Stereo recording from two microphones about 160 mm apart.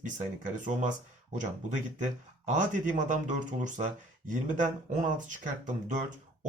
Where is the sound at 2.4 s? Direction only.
50° right (ahead or behind).